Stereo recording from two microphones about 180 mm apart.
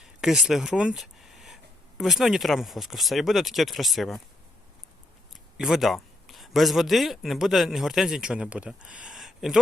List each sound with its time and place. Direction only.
0.0 s speech: centre (ahead or behind)
5.3 s speech: centre (ahead or behind)